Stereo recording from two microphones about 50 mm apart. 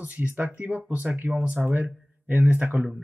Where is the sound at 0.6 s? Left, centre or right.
Right.